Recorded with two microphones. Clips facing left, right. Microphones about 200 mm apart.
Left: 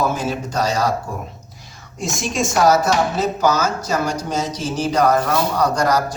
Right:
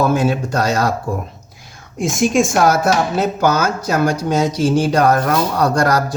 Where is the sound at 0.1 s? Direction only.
60° right (ahead or behind).